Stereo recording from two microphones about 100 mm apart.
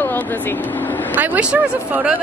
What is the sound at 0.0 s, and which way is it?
Speech, 20° left (ahead or behind).